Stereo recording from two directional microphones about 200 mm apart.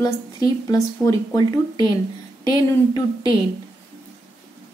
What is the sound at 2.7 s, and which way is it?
Speech, 20° left (ahead or behind).